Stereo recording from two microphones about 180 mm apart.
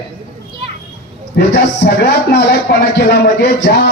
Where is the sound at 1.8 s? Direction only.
65° left (ahead or behind).